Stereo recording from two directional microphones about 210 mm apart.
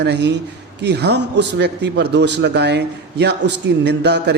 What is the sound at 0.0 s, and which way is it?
A man's voice, 55° right (ahead or behind).